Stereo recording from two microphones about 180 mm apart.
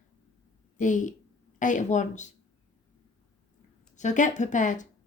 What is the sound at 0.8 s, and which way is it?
Speech, 45° left (ahead or behind).